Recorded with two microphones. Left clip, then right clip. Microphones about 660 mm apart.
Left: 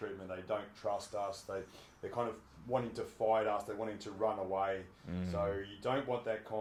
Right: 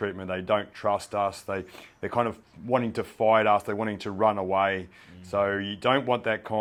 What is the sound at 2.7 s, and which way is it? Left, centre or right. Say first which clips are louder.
Speech: right 10 dB; right.